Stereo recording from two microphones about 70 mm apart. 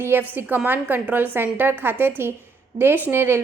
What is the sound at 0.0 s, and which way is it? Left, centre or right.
A woman's voice, right.